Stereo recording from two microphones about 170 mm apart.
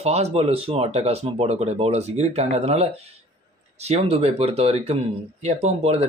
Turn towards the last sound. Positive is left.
turn(degrees=-40)  # may be behind; listen again after turning